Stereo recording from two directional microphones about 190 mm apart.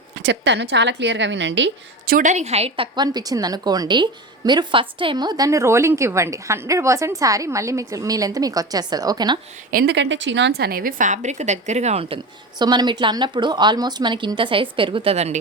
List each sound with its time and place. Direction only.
0.2 s a woman's voice: 70° right (ahead or behind)
2.1 s a woman's voice: 40° right (ahead or behind); by 9.4 s 20° right (ahead or behind)
9.7 s a woman's voice: 65° right (ahead or behind); by 15.4 s 35° right (ahead or behind)